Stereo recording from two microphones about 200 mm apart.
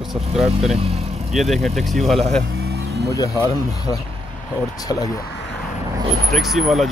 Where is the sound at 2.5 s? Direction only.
50° right (ahead or behind).